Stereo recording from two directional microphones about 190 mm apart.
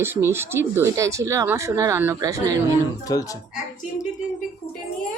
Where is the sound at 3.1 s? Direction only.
15° left (ahead or behind).